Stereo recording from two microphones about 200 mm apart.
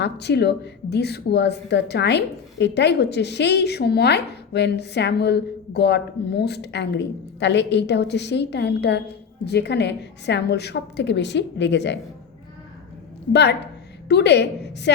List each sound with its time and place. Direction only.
0.0 s a woman's voice: 55° left (ahead or behind)
13.3 s a woman's voice: 55° left (ahead or behind)